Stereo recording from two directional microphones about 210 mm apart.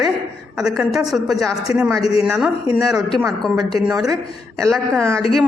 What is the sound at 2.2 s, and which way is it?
Speech, 5° right (ahead or behind).